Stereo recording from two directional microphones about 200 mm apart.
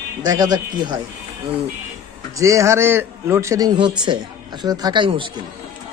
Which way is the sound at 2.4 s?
15° right (ahead or behind).